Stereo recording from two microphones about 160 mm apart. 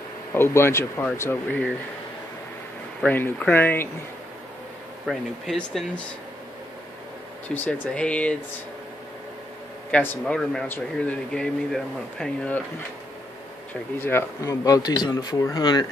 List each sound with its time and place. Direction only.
0.3 s a man's voice: 15° left (ahead or behind)
3.0 s a man's voice: 10° left (ahead or behind)
5.0 s speech: centre (ahead or behind)
7.4 s a man's voice: 10° left (ahead or behind)
9.8 s a man's voice: 5° left (ahead or behind)
13.9 s speech: 15° left (ahead or behind)